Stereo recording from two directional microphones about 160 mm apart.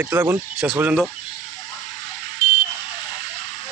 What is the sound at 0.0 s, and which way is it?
Speech, 15° right (ahead or behind).